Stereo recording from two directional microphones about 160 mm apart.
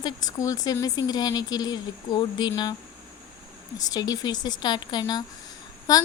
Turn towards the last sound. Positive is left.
turn(degrees=20)  # may be behind; listen again after turning